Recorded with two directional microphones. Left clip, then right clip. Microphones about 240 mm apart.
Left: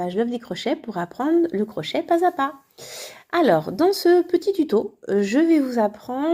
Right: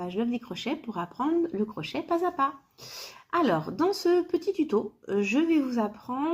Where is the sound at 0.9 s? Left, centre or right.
Left.